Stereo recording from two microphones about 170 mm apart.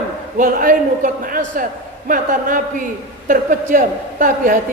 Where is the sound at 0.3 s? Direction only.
55° right (ahead or behind).